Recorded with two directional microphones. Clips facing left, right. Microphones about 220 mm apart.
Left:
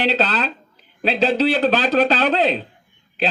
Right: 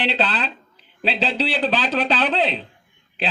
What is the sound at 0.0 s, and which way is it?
A man's voice, 45° left (ahead or behind).